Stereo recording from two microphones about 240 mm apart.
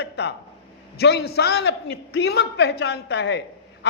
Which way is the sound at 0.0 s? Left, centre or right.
Left.